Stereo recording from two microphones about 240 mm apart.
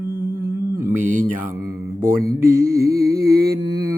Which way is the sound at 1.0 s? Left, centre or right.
Right.